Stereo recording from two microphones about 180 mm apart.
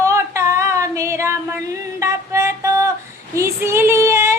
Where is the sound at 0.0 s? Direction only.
15° right (ahead or behind).